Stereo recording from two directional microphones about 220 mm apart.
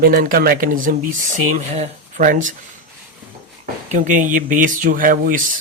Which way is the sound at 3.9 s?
35° right (ahead or behind).